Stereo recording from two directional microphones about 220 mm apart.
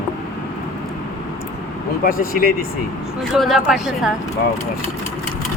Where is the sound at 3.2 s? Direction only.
Centre (ahead or behind).